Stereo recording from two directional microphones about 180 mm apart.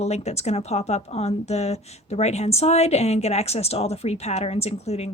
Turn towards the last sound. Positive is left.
turn(degrees=35)  # may be behind; listen again after turning